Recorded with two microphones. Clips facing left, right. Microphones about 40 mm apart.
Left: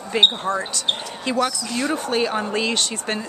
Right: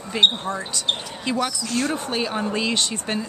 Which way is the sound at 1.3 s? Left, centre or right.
Centre.